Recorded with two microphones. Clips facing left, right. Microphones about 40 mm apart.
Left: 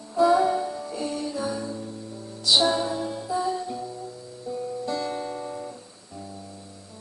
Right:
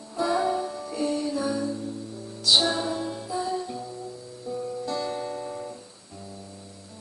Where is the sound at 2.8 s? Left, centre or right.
Centre.